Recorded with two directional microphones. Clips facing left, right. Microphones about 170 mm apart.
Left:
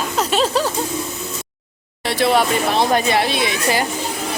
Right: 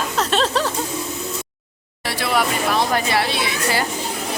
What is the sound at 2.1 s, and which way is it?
Speech, 25° left (ahead or behind).